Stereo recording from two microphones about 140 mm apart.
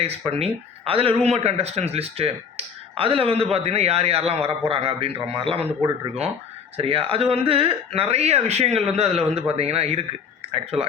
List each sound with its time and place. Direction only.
0.3 s speech: 45° right (ahead or behind)
6.7 s speech: 45° right (ahead or behind)